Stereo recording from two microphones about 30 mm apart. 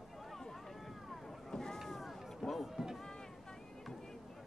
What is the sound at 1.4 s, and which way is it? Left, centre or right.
Boat, centre.